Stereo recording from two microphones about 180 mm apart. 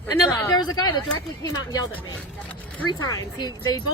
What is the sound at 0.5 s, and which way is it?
Speech, 20° left (ahead or behind).